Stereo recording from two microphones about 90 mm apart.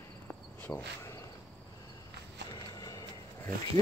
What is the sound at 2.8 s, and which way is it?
Vehicle, 50° left (ahead or behind).